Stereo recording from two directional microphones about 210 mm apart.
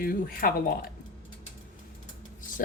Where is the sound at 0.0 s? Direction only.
45° left (ahead or behind).